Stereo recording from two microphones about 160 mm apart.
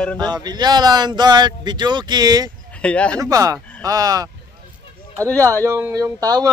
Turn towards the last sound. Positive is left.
turn(degrees=-25)  # may be behind; listen again after turning